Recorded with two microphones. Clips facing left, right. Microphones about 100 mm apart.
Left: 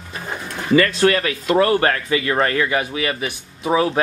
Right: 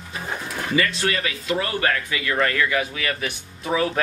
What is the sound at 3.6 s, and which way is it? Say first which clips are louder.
Speech: left 5 dB; 30° left (ahead or behind).